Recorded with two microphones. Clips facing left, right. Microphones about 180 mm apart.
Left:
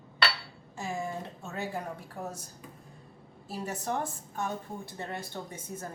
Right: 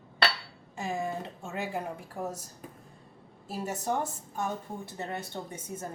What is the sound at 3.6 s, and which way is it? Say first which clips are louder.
Speech: right 2 dB; 20° right (ahead or behind).